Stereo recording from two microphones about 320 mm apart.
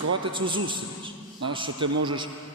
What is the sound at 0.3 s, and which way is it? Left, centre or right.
A man's voice, centre.